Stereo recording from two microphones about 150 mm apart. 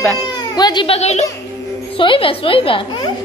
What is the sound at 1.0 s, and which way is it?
Speech, 45° left (ahead or behind).